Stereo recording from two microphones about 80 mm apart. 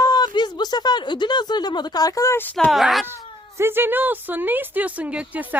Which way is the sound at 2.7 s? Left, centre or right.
Centre.